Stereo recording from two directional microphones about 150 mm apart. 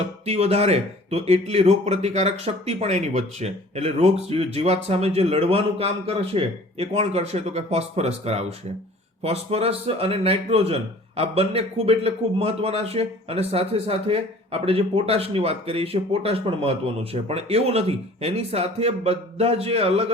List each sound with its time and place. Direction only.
0.3 s a man's voice: 45° right (ahead or behind)